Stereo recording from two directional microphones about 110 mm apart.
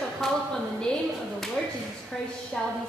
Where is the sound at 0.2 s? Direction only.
Centre (ahead or behind).